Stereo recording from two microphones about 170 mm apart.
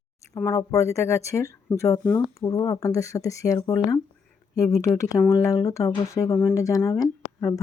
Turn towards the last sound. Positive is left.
turn(degrees=20)  # may be behind; listen again after turning